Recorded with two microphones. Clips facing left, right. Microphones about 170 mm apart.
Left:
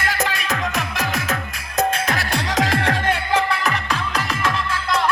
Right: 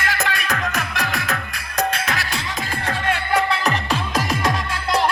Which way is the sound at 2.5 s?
90° left.